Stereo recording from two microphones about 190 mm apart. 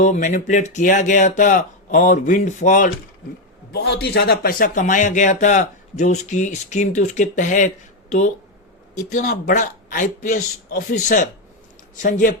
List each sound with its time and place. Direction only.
0.0 s speech: 40° left (ahead or behind)
3.7 s speech: 60° left (ahead or behind); by 7.7 s 40° left (ahead or behind)
9.0 s speech: 40° left (ahead or behind)